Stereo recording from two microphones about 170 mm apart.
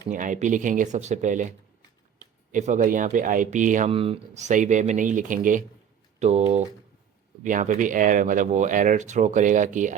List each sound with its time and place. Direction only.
0.1 s speech: 50° right (ahead or behind)
3.9 s speech: 35° right (ahead or behind)